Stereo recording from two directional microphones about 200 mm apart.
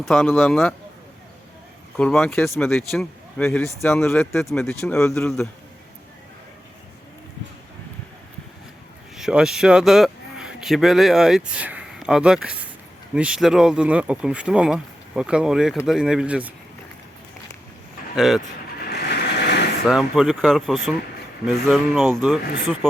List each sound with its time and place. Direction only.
0.0 s speech: centre (ahead or behind)
2.0 s speech: 5° left (ahead or behind)
9.1 s speech: 5° right (ahead or behind)
18.1 s speech: centre (ahead or behind)
18.8 s vehicle: 55° left (ahead or behind)
19.9 s speech: centre (ahead or behind)